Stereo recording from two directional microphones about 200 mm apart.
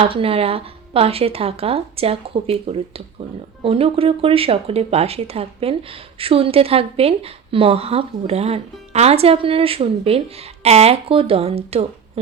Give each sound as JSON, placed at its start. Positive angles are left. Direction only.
{"t": 0.0, "sound": "a woman's voice", "side_deg": -30}